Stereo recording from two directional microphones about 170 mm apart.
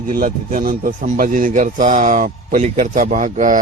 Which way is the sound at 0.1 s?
55° right (ahead or behind).